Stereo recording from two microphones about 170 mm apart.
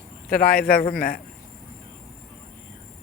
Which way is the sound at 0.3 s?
60° left (ahead or behind).